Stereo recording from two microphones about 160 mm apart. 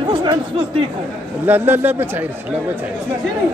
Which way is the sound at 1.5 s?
15° right (ahead or behind).